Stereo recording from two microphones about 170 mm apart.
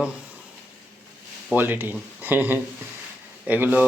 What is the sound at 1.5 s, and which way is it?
Speech, 10° right (ahead or behind).